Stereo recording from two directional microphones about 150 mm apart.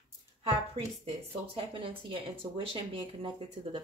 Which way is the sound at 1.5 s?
35° right (ahead or behind).